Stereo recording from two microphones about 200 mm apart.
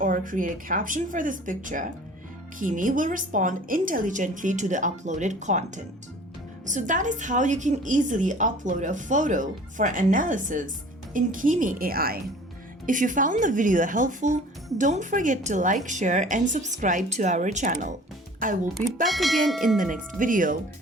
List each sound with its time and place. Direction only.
0.0 s a woman's voice: 40° right (ahead or behind)
19.0 s speech: centre (ahead or behind)
19.8 s a woman's voice: 40° right (ahead or behind)